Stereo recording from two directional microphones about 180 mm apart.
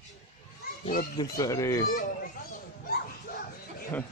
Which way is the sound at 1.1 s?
20° left (ahead or behind).